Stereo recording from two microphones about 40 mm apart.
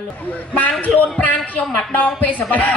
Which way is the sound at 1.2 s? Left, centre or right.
Left.